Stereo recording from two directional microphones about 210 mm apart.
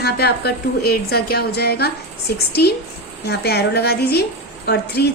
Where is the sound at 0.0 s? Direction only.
50° left (ahead or behind).